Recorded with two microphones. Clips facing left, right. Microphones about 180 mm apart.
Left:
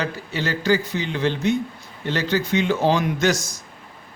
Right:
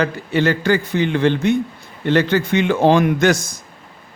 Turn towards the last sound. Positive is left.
turn(degrees=-55)  # may be behind; listen again after turning